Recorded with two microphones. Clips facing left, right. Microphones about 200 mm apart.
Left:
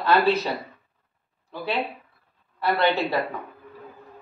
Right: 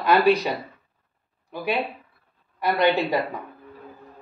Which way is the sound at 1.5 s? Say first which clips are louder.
Right 2 dB; 15° right (ahead or behind).